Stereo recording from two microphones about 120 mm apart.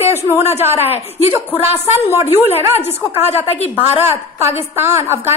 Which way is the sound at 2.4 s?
60° left (ahead or behind).